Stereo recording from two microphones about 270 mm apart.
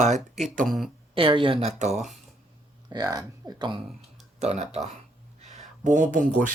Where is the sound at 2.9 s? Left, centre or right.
Centre.